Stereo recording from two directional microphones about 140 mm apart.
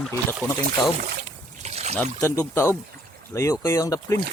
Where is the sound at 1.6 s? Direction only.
50° right (ahead or behind).